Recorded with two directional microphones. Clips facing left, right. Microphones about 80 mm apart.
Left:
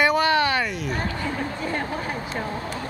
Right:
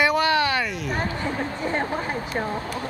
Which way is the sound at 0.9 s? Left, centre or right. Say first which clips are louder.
Right 1 dB; right.